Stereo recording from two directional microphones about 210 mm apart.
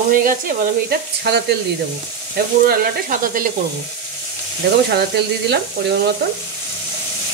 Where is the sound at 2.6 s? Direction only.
40° right (ahead or behind).